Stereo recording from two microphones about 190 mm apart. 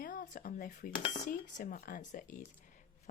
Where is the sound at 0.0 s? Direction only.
45° left (ahead or behind).